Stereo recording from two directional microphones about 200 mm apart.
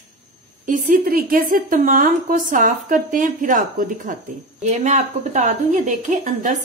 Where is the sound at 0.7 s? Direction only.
45° right (ahead or behind).